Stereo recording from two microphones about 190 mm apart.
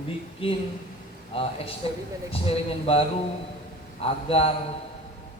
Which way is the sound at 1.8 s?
30° left (ahead or behind).